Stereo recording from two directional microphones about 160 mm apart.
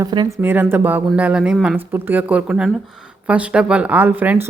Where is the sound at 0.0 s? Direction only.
25° right (ahead or behind).